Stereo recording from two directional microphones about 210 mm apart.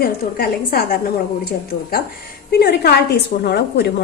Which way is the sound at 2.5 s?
50° left (ahead or behind).